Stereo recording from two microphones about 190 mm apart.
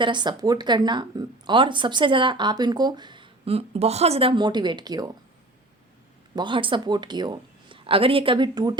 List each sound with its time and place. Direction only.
0.0 s speech: 25° right (ahead or behind)
6.3 s speech: 25° right (ahead or behind)